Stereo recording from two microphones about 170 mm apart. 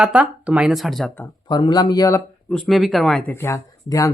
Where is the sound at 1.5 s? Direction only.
25° left (ahead or behind).